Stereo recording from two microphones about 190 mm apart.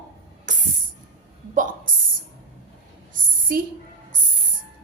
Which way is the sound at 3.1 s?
45° right (ahead or behind).